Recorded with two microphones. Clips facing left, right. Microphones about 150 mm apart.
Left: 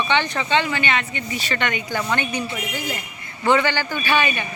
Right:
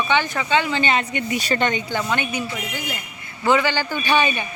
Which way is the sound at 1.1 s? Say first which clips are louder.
Right 5 dB; 55° right (ahead or behind).